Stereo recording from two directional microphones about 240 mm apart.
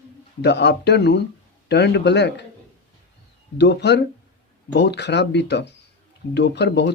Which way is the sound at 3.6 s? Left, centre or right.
Left.